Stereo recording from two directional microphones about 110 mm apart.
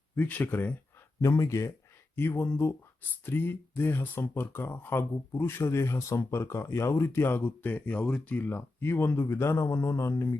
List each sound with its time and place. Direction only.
0.2 s speech: 15° left (ahead or behind)
1.2 s speech: 30° left (ahead or behind)